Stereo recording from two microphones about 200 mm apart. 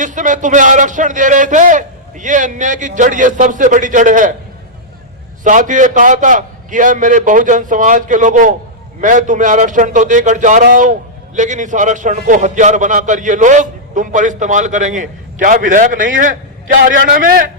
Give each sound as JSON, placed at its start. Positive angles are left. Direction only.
{"t": 0.0, "sound": "a man's voice", "side_deg": -40}
{"t": 5.4, "sound": "a man's voice", "side_deg": -40}